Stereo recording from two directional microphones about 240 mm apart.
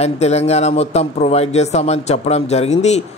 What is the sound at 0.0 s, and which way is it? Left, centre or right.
A man's voice, left.